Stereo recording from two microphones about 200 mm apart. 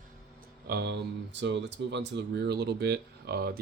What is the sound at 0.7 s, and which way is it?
Speech, 55° right (ahead or behind).